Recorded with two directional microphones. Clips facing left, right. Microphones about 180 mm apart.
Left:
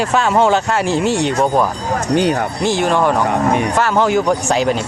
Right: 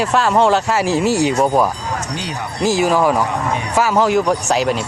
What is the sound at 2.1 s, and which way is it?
Speech, 55° left (ahead or behind).